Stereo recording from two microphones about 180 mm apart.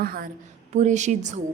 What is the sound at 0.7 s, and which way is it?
Speech, 40° right (ahead or behind).